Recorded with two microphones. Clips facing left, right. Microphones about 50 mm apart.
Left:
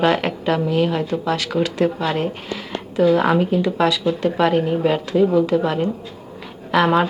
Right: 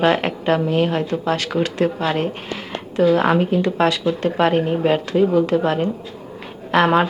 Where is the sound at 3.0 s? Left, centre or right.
Right.